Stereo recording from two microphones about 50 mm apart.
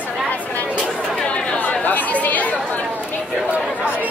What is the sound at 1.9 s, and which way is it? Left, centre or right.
Speech, left.